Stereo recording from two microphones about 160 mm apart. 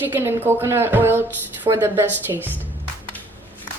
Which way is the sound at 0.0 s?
15° right (ahead or behind).